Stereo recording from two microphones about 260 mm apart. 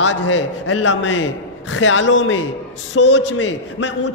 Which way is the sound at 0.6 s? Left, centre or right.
Left.